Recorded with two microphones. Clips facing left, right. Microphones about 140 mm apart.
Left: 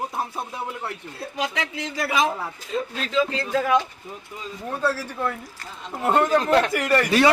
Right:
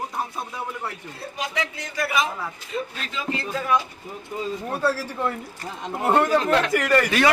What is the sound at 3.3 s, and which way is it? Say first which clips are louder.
Speech: left 2 dB; 65° left (ahead or behind).